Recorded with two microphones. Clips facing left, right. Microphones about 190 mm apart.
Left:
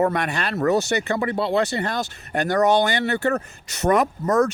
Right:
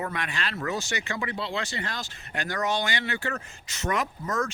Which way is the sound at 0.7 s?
60° left (ahead or behind).